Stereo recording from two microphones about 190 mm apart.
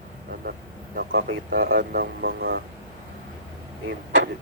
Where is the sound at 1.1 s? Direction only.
90° right.